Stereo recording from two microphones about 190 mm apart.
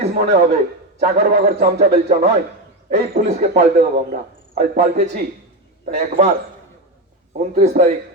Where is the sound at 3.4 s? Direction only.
50° right (ahead or behind).